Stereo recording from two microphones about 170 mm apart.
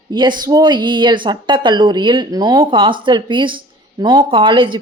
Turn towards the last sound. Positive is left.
turn(degrees=-30)  # may be behind; listen again after turning